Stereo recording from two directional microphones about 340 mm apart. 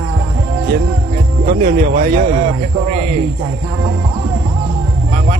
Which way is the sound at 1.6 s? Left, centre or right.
Right.